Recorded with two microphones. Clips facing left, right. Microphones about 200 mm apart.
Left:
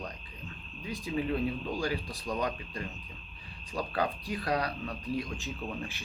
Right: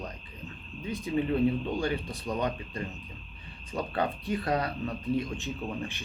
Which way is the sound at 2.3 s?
20° right (ahead or behind).